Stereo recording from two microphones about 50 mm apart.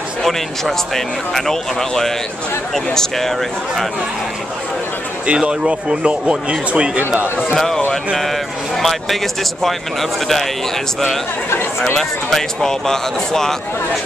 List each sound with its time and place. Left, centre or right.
0.2 s speech: centre
5.2 s speech: right
7.0 s speech: right
7.5 s speech: centre
11.8 s speech: centre